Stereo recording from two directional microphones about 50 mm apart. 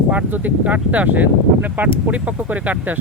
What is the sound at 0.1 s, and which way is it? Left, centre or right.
Speech, right.